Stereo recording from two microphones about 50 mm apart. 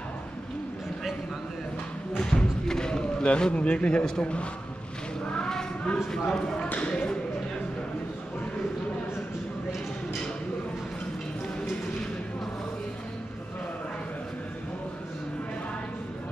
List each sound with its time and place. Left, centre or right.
2.1 s basketball bounce: centre
3.5 s speech: left
5.3 s a sound: centre
6.3 s speech: centre